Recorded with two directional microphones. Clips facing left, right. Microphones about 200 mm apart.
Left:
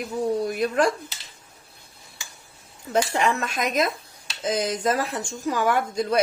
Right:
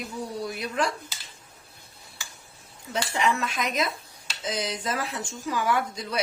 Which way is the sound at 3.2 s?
50° left (ahead or behind).